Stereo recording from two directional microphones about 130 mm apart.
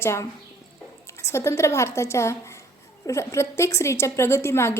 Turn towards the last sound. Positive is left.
turn(degrees=20)  # may be behind; listen again after turning